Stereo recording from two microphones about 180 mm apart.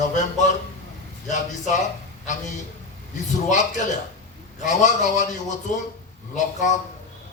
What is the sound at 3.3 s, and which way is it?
Speech, 45° left (ahead or behind).